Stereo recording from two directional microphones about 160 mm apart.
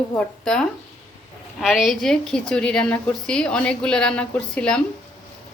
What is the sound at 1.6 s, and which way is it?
A woman's voice, centre (ahead or behind).